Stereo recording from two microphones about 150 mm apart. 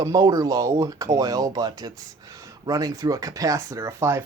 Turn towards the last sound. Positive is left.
turn(degrees=-15)  # may be behind; listen again after turning